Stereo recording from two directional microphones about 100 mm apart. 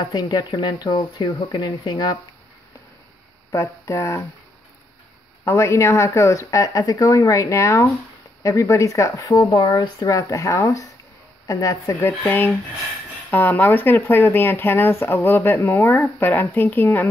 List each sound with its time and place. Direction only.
0.0 s speech: 45° left (ahead or behind)
3.5 s speech: 30° left (ahead or behind)
5.4 s speech: 30° left (ahead or behind)